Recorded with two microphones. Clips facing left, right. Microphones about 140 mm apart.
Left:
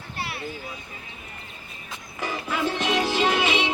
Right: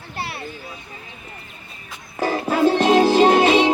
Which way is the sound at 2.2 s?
40° right (ahead or behind).